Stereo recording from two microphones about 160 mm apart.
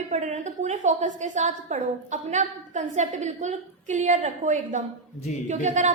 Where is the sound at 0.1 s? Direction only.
45° right (ahead or behind).